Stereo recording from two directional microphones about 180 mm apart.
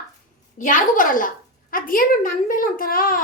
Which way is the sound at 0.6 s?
50° left (ahead or behind).